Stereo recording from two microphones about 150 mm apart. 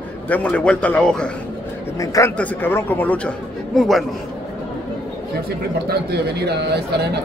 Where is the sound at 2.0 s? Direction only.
20° left (ahead or behind).